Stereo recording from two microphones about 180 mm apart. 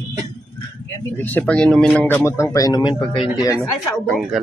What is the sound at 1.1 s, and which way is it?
Speech, 10° left (ahead or behind).